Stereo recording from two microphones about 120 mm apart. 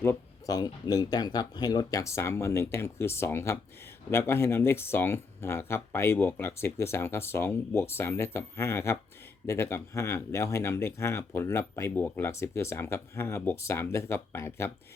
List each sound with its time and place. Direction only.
0.4 s speech: 30° left (ahead or behind)